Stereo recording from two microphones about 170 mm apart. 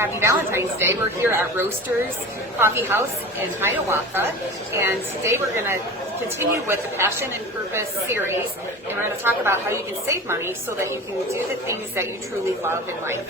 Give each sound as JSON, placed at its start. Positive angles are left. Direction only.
{"t": 0.0, "sound": "a woman's voice", "side_deg": -15}